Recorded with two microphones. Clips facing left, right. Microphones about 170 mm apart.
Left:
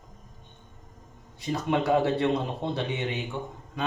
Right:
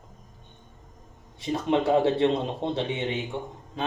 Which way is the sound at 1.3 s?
25° right (ahead or behind).